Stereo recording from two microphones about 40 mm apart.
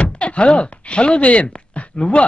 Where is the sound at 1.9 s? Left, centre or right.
Left.